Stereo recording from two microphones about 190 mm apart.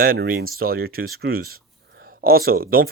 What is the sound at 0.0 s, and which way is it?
Speech, 50° right (ahead or behind).